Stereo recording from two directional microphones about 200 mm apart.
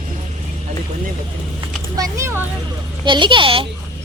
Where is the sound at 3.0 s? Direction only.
25° right (ahead or behind).